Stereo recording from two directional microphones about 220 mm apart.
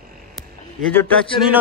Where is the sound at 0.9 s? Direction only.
5° left (ahead or behind).